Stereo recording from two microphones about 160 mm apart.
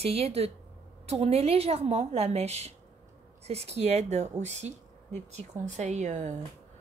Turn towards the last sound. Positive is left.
turn(degrees=-50)  # may be behind; listen again after turning